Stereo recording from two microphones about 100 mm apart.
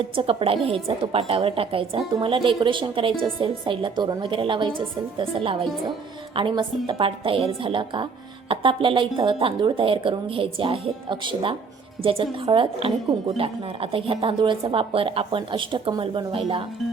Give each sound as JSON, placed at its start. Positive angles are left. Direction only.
{"t": 0.0, "sound": "a woman's voice", "side_deg": -60}
{"t": 6.3, "sound": "a woman's voice", "side_deg": -55}
{"t": 13.9, "sound": "a woman's voice", "side_deg": -65}